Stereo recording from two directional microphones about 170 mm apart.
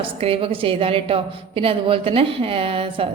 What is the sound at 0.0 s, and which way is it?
A woman's voice, 30° right (ahead or behind).